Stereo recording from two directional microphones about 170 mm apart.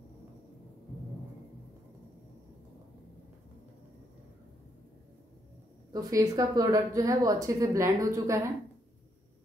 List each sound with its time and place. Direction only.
5.9 s speech: 20° right (ahead or behind)